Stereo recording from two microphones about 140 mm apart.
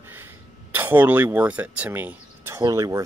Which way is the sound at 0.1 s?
15° right (ahead or behind).